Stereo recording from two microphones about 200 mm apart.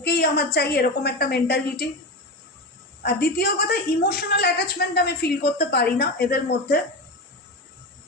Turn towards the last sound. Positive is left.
turn(degrees=50)  # may be behind; listen again after turning